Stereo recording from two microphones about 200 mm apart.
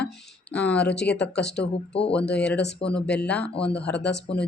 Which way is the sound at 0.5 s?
5° left (ahead or behind).